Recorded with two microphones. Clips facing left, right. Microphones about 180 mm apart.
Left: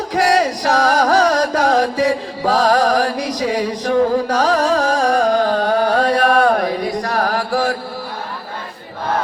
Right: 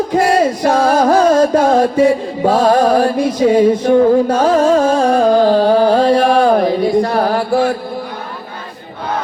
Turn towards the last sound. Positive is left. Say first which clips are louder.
# right 4 dB
turn(degrees=-25)  # may be behind; listen again after turning